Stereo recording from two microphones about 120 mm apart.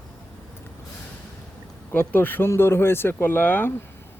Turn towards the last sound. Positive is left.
turn(degrees=15)  # may be behind; listen again after turning